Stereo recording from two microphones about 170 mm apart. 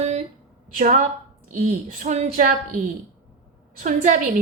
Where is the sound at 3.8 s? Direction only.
50° right (ahead or behind).